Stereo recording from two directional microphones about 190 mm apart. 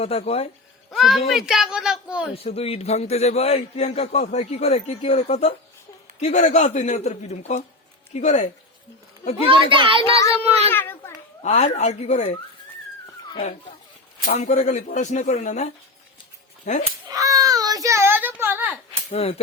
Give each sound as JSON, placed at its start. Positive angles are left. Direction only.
{"t": 0.0, "sound": "a man's voice", "side_deg": 30}
{"t": 0.9, "sound": "a woman's voice", "side_deg": 0}
{"t": 2.3, "sound": "a man's voice", "side_deg": 30}
{"t": 9.5, "sound": "a child's voice", "side_deg": -25}
{"t": 10.2, "sound": "a child's voice", "side_deg": 15}
{"t": 10.7, "sound": "children playing", "side_deg": 10}
{"t": 11.4, "sound": "a man's voice", "side_deg": 35}
{"t": 14.3, "sound": "a man's voice", "side_deg": 35}
{"t": 17.2, "sound": "baby cry", "side_deg": -20}
{"t": 19.1, "sound": "a man's voice", "side_deg": 30}